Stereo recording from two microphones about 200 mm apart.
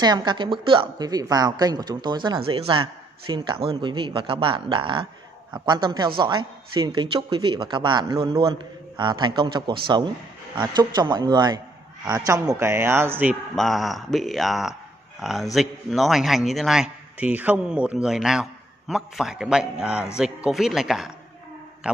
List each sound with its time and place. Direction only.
0.0 s a woman's voice: 20° right (ahead or behind); by 22.0 s 5° right (ahead or behind)